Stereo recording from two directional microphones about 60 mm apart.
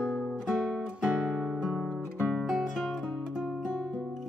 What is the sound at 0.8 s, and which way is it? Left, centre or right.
Guitar, right.